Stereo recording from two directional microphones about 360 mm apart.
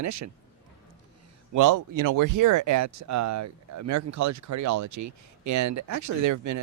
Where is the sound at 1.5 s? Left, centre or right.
Right.